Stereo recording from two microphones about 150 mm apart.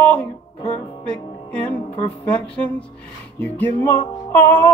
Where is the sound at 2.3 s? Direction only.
10° left (ahead or behind).